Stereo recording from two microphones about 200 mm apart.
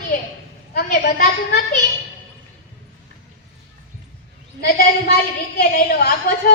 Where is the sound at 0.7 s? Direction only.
45° left (ahead or behind).